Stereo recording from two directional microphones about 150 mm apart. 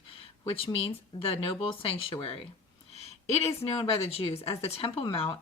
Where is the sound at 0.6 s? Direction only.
40° left (ahead or behind).